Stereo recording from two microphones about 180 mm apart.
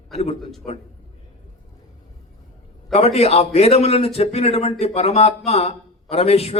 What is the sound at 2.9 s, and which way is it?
A man's voice, 35° left (ahead or behind).